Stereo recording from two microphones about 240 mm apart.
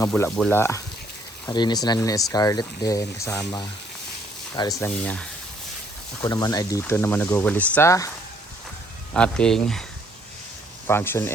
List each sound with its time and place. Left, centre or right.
0.0 s speech: centre
4.7 s speech: centre
6.2 s speech: centre
9.1 s speech: centre
10.8 s speech: centre